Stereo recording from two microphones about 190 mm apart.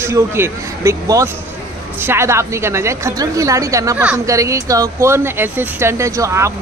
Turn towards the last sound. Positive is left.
turn(degrees=-15)  # may be behind; listen again after turning